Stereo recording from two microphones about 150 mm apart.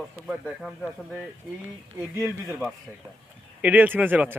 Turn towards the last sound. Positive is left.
turn(degrees=-10)  # may be behind; listen again after turning